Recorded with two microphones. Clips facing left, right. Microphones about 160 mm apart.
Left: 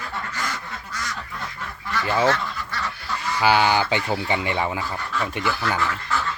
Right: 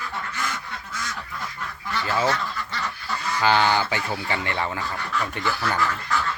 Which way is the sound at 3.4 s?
15° left (ahead or behind).